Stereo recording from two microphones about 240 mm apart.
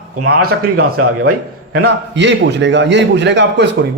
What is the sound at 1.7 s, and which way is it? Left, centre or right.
A man's voice, right.